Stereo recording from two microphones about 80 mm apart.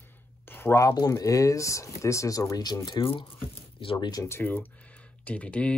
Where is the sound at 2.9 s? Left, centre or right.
Left.